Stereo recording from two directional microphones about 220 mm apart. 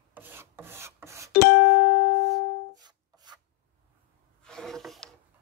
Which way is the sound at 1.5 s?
70° left (ahead or behind).